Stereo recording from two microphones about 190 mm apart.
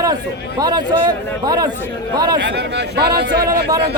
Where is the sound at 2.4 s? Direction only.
65° right (ahead or behind).